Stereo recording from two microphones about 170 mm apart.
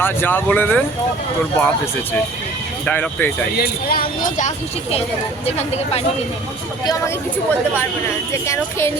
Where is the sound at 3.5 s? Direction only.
60° left (ahead or behind).